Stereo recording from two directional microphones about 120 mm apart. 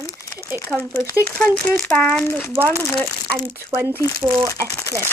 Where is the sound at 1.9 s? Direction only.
5° left (ahead or behind).